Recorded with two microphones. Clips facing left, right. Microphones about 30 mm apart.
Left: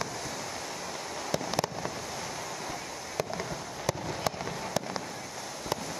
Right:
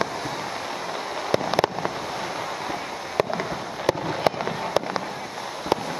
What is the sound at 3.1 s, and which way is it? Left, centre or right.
Fireworks, right.